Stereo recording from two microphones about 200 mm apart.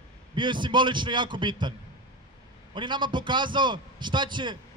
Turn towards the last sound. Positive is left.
turn(degrees=-25)  # may be behind; listen again after turning